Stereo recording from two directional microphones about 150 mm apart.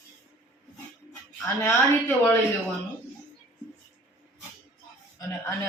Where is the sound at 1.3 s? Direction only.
15° left (ahead or behind).